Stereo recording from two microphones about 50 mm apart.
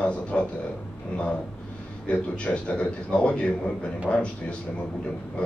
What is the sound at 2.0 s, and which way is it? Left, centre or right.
A man's voice, left.